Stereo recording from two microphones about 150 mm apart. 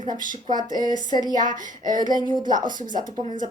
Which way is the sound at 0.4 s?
30° right (ahead or behind).